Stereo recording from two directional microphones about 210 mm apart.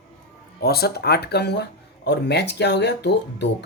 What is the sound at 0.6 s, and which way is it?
Speech, 50° left (ahead or behind).